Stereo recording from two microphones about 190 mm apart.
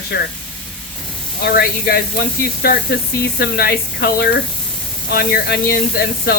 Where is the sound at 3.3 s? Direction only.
55° left (ahead or behind).